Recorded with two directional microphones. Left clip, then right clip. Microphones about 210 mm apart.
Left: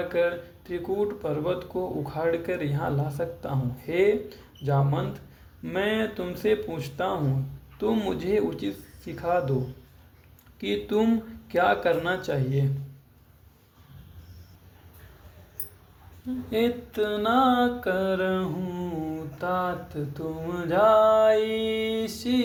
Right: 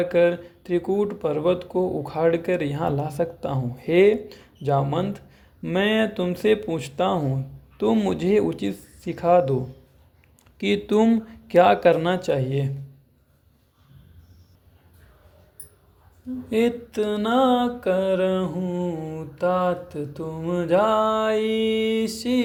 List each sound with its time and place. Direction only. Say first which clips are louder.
0.1 s speech: right 6 dB; 40° right (ahead or behind)
10.6 s speech: right 5 dB; 40° right (ahead or behind)
16.5 s a sound: right 4 dB; 45° right (ahead or behind)